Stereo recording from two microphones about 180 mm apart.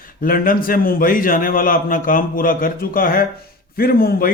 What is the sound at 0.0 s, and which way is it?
A man's voice, 50° left (ahead or behind).